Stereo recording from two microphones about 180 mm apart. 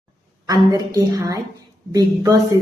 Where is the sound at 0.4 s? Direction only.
20° right (ahead or behind).